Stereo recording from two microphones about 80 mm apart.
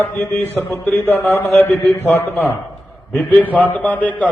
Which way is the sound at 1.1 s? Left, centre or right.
Left.